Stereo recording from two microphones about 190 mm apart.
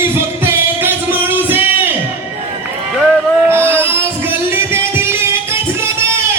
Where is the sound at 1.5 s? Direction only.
10° right (ahead or behind).